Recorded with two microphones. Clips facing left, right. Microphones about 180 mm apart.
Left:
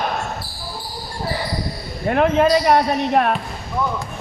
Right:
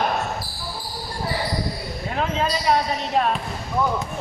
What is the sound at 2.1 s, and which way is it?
Speech, 60° left (ahead or behind).